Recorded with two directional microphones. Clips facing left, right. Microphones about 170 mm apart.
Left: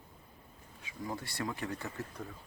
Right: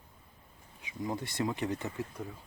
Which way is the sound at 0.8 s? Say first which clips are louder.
Right 4 dB; 20° right (ahead or behind).